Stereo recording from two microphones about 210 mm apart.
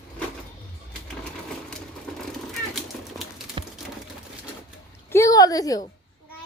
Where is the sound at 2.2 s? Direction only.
Centre (ahead or behind).